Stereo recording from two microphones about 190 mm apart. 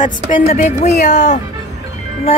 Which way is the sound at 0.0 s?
40° left (ahead or behind).